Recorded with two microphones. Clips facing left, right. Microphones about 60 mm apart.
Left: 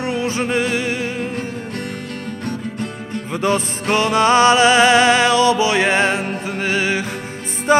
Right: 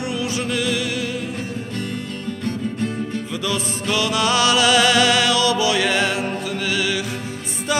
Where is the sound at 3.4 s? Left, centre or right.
Left.